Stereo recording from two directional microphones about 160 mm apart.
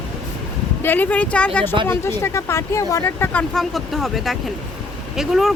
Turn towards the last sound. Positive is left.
turn(degrees=0)  # may be behind; listen again after turning